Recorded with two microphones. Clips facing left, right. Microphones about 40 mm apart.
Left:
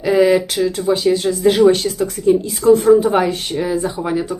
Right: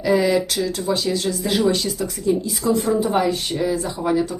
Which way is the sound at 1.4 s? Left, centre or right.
Left.